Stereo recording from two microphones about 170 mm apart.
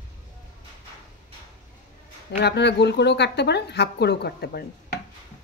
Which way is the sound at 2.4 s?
85° left.